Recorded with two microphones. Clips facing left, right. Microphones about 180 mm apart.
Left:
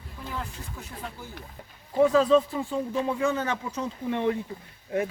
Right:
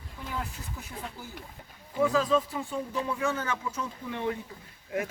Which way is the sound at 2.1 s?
35° left (ahead or behind).